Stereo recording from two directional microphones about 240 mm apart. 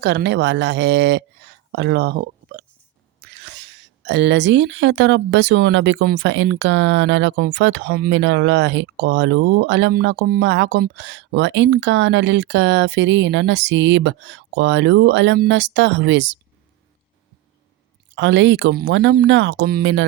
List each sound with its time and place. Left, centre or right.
0.0 s speech: right
18.1 s speech: right